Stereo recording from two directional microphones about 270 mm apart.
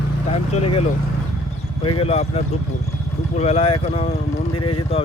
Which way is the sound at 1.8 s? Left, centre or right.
Left.